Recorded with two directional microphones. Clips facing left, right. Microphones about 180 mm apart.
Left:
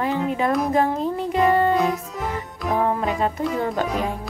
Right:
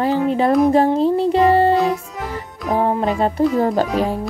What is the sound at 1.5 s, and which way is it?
Music, 30° right (ahead or behind).